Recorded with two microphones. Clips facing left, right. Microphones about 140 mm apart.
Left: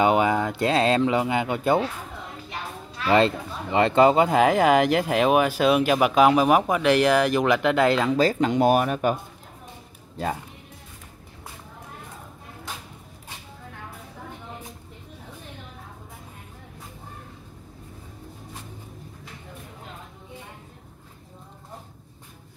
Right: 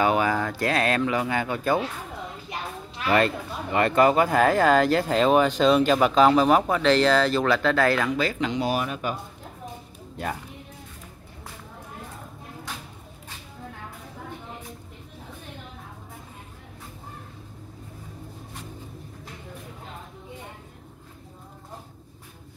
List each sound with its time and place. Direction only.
0.0 s speech: 20° left (ahead or behind)
3.1 s speech: 25° left (ahead or behind)
8.2 s speech: 40° left (ahead or behind)